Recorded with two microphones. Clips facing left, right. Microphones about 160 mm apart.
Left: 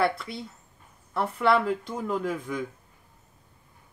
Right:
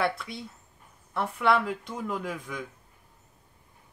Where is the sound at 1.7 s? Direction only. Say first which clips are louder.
Left 4 dB; 5° right (ahead or behind).